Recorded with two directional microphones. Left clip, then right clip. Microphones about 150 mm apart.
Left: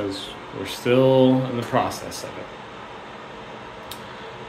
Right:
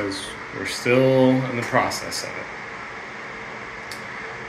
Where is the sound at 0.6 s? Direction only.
20° left (ahead or behind).